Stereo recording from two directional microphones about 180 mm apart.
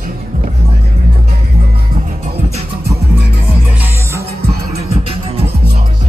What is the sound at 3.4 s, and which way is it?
Music, 10° right (ahead or behind).